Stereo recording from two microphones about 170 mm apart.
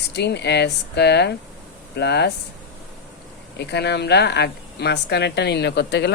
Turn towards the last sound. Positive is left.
turn(degrees=85)